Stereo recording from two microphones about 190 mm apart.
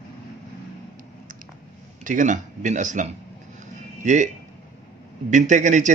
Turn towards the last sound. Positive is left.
turn(degrees=-40)  # may be behind; listen again after turning